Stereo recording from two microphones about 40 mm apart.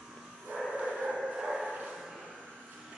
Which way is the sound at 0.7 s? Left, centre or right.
Centre.